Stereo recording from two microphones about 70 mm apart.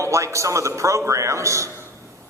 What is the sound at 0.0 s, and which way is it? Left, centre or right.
A man's voice, right.